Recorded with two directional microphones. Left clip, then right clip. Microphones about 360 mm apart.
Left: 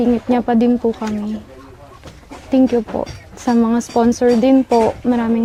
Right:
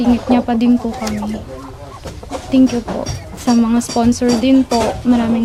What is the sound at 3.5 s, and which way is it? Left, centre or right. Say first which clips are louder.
A woman's voice: right 1 dB; left.